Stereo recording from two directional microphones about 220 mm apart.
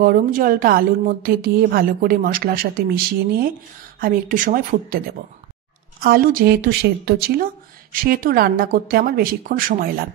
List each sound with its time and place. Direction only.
0.0 s a woman's voice: 40° right (ahead or behind)
4.0 s a woman's voice: 40° right (ahead or behind)